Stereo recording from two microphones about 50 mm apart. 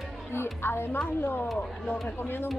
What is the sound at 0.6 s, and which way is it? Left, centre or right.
Speech, left.